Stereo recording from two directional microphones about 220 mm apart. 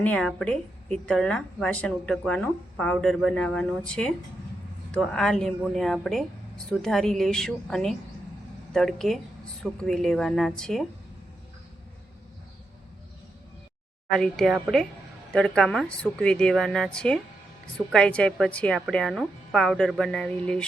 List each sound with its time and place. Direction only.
0.0 s a woman's voice: 5° left (ahead or behind)
14.1 s a woman's voice: centre (ahead or behind)